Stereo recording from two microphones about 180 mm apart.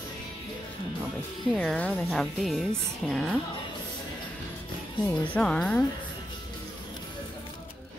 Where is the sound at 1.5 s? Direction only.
5° left (ahead or behind).